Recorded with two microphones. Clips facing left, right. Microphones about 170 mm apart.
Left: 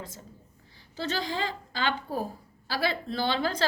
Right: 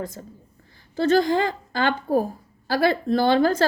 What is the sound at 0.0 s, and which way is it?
A woman's voice, 50° right (ahead or behind).